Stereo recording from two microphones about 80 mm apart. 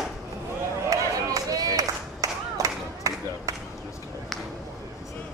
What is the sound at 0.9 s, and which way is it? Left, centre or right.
Clapping, right.